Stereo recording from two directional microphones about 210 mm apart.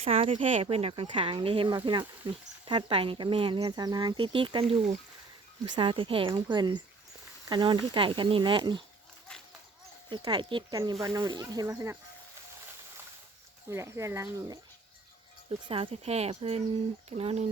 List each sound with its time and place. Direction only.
0.0 s speech: 25° right (ahead or behind)
10.1 s speech: 20° right (ahead or behind)
13.7 s speech: 15° right (ahead or behind); by 17.5 s 30° right (ahead or behind)